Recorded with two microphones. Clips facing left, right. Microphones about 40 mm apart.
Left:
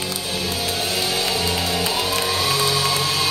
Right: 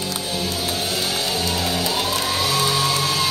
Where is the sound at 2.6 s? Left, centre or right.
Centre.